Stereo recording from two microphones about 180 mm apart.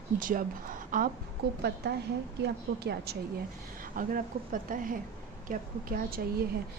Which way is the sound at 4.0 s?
50° right (ahead or behind).